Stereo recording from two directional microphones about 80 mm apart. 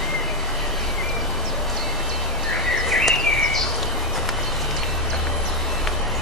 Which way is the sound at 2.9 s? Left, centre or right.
Centre.